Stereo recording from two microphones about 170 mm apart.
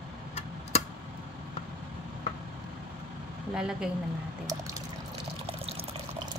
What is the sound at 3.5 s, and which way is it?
Speech, 5° right (ahead or behind).